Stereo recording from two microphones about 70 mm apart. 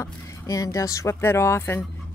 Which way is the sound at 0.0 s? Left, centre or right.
Left.